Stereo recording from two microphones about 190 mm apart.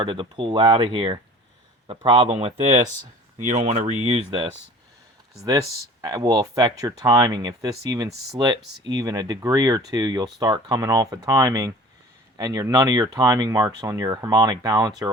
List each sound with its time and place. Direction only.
0.0 s speech: 25° right (ahead or behind)
6.0 s speech: 20° right (ahead or behind)